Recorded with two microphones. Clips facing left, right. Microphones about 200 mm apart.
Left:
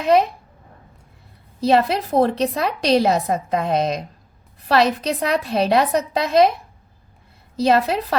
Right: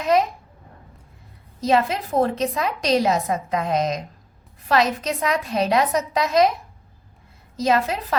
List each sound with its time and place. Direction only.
0.0 s a woman's voice: 30° left (ahead or behind)
1.6 s a woman's voice: 35° left (ahead or behind)
7.6 s a woman's voice: 35° left (ahead or behind)